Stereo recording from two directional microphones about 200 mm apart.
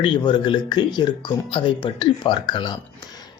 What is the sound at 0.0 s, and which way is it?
Speech, 25° left (ahead or behind).